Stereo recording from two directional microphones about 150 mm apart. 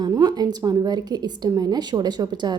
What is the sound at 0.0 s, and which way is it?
A woman's voice, 25° right (ahead or behind).